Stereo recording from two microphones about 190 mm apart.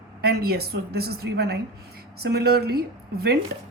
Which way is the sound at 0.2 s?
55° right (ahead or behind).